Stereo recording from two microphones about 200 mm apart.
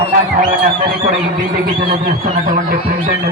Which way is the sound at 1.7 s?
45° right (ahead or behind).